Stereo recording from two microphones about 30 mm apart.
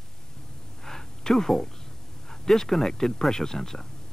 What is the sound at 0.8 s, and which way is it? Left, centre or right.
Speech, centre.